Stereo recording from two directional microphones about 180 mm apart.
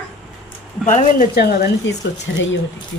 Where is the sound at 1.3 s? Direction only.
60° left (ahead or behind).